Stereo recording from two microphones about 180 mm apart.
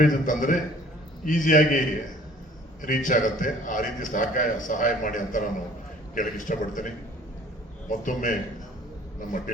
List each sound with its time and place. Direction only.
0.0 s a man's voice: 45° left (ahead or behind)
2.8 s a man's voice: 45° left (ahead or behind)